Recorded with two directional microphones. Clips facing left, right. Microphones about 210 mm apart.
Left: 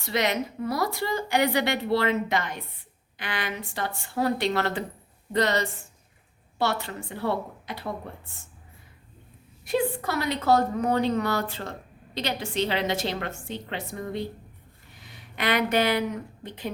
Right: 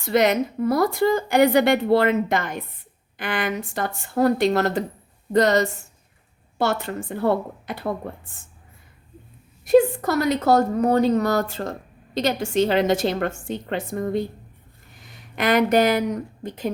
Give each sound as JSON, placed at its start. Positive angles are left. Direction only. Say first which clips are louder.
{"t": 0.0, "sound": "a woman's voice", "louder": "right 7 dB", "side_deg": -50}
{"t": 9.6, "sound": "a woman's voice", "louder": "right 10 dB", "side_deg": -45}